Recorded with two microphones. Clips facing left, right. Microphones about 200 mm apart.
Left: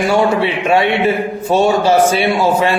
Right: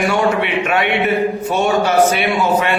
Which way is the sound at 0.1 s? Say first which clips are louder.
Left 3 dB; 30° left (ahead or behind).